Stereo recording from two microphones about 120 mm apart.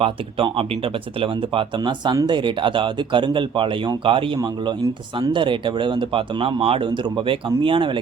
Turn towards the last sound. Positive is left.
turn(degrees=-45)  # may be behind; listen again after turning